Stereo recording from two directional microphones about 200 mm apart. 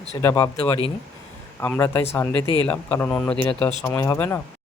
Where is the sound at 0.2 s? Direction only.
15° left (ahead or behind).